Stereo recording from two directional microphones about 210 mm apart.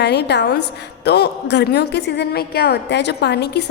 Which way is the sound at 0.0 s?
55° left (ahead or behind).